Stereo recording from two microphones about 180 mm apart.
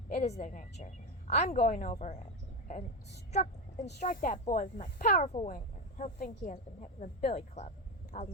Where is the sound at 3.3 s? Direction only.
40° left (ahead or behind).